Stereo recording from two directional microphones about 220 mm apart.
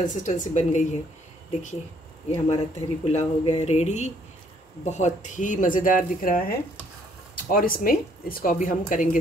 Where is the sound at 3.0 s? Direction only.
30° left (ahead or behind).